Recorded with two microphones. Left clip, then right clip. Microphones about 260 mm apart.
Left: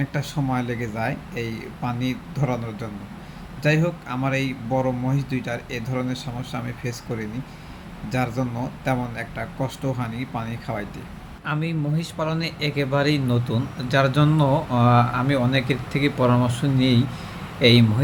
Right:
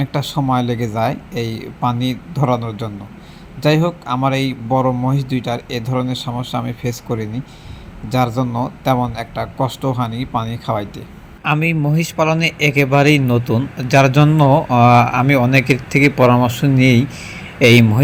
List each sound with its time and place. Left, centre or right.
0.0 s a man's voice: centre